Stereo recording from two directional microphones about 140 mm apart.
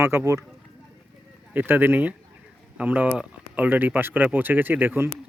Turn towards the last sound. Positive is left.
turn(degrees=-15)  # may be behind; listen again after turning